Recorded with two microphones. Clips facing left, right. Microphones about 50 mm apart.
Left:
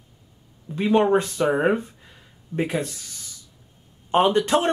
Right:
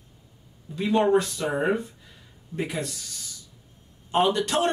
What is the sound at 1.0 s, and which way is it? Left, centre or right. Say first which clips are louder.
Speech: left 2 dB; left.